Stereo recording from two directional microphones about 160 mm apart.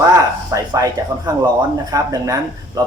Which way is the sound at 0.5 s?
25° right (ahead or behind).